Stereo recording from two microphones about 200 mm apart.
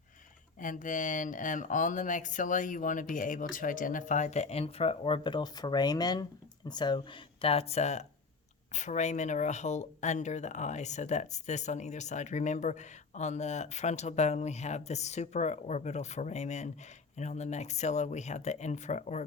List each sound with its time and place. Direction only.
0.6 s speech: 40° left (ahead or behind)